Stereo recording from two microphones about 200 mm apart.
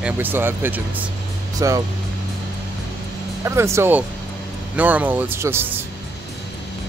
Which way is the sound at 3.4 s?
15° right (ahead or behind).